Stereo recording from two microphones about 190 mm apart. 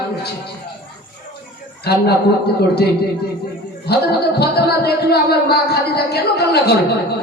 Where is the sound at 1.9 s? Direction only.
55° left (ahead or behind).